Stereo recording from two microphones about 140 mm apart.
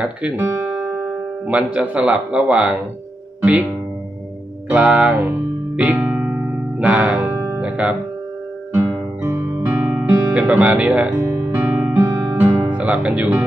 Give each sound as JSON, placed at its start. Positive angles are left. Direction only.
{"t": 0.0, "sound": "guitar", "side_deg": -10}
{"t": 1.5, "sound": "a man's voice", "side_deg": -10}
{"t": 4.6, "sound": "a man's voice", "side_deg": -10}
{"t": 5.8, "sound": "music", "side_deg": -10}
{"t": 7.2, "sound": "music", "side_deg": -20}
{"t": 7.6, "sound": "speech", "side_deg": -10}
{"t": 9.2, "sound": "guitar", "side_deg": -15}
{"t": 10.4, "sound": "a man's voice", "side_deg": -10}
{"t": 11.2, "sound": "music", "side_deg": -15}
{"t": 12.1, "sound": "music", "side_deg": -20}
{"t": 12.7, "sound": "speech", "side_deg": -10}